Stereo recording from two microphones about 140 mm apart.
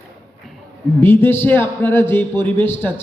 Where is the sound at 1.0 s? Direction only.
15° left (ahead or behind).